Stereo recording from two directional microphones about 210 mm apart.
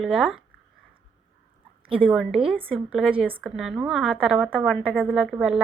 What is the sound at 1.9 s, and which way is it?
A woman's voice, 5° right (ahead or behind).